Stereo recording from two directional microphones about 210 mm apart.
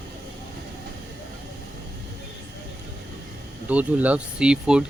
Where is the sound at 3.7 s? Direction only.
5° right (ahead or behind).